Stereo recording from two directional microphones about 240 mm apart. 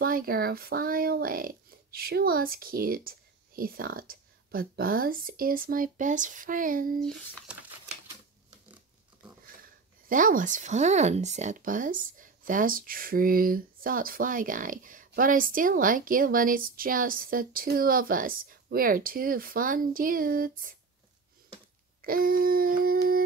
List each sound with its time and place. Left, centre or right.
0.0 s speech: right
7.5 s typewriter: centre
9.6 s speech: right
22.0 s speech: right